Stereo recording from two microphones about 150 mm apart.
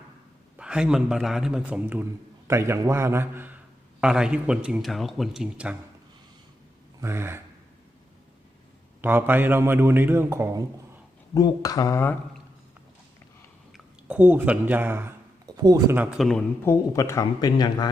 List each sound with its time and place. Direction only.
0.5 s a man's voice: 5° right (ahead or behind)
4.0 s a man's voice: 5° right (ahead or behind)
7.0 s a man's voice: 15° right (ahead or behind)
9.0 s a man's voice: 15° right (ahead or behind)
11.3 s speech: 25° left (ahead or behind)
13.7 s speech: 10° right (ahead or behind)
15.4 s speech: 25° right (ahead or behind)
16.0 s a man's voice: 5° right (ahead or behind)
16.6 s speech: 20° left (ahead or behind)